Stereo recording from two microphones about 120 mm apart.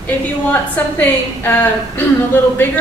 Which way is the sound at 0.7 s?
15° left (ahead or behind).